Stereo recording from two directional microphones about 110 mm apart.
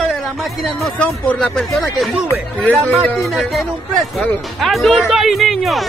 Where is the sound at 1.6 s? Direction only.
Centre (ahead or behind).